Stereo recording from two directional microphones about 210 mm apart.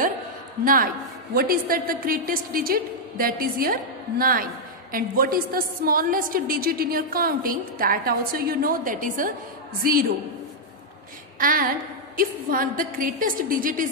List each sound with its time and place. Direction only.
1.3 s a woman's voice: 45° right (ahead or behind)
11.3 s a woman's voice: 40° right (ahead or behind)